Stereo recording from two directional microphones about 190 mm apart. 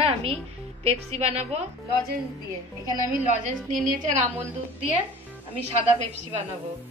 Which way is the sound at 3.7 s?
45° right (ahead or behind).